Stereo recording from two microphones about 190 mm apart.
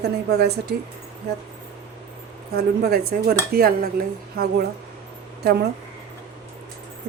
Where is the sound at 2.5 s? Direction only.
55° right (ahead or behind).